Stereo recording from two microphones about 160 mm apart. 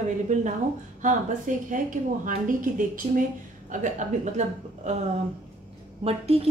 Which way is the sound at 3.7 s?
55° right (ahead or behind).